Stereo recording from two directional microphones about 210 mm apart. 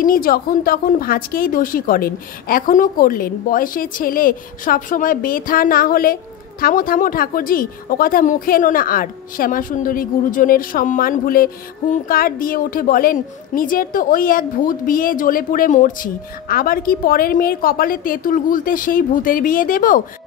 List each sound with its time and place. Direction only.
0.0 s a woman's voice: 45° left (ahead or behind)